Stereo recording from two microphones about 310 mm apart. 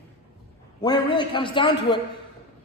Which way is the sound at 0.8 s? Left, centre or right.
Centre.